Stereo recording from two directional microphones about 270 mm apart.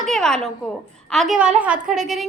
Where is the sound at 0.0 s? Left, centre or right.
Centre.